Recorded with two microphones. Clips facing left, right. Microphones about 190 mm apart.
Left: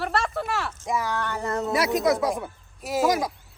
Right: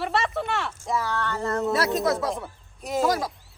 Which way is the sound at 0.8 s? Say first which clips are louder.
Even; 15° left (ahead or behind).